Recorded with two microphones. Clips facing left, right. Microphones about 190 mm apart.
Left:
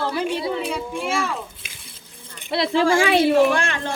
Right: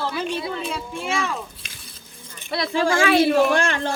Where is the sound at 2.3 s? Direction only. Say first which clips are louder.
Left 3 dB; 20° left (ahead or behind).